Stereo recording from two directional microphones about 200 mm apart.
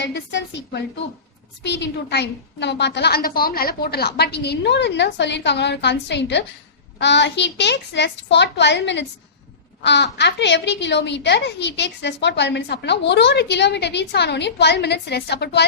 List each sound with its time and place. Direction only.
0.0 s a woman's voice: 60° left (ahead or behind)